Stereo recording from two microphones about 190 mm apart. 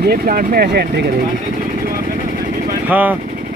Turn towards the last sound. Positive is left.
turn(degrees=-10)  # may be behind; listen again after turning